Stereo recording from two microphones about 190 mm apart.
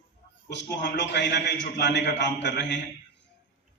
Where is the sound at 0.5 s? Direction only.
65° left (ahead or behind).